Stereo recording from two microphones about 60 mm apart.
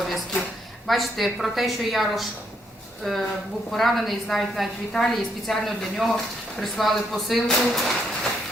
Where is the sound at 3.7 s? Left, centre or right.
Centre.